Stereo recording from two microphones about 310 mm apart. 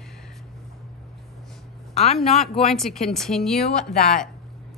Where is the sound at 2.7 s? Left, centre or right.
Centre.